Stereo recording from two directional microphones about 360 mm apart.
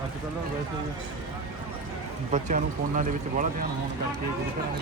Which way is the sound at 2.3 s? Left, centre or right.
Right.